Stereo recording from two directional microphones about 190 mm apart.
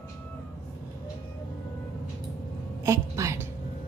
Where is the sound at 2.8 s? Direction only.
15° right (ahead or behind).